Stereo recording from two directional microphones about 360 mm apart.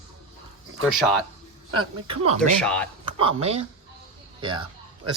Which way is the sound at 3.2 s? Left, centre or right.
Centre.